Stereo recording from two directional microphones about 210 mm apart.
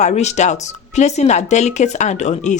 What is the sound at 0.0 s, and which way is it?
Speech, 30° left (ahead or behind).